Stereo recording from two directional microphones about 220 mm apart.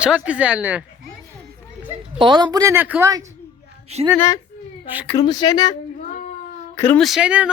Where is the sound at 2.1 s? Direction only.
20° right (ahead or behind).